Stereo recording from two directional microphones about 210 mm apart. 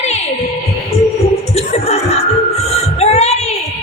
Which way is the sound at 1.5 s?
30° left (ahead or behind).